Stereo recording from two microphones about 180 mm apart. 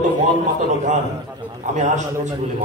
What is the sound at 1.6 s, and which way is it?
Speech, 40° right (ahead or behind).